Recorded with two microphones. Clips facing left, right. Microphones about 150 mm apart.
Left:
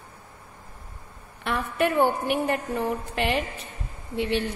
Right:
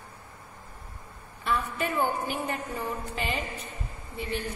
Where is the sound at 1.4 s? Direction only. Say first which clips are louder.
Left 4 dB; 65° left (ahead or behind).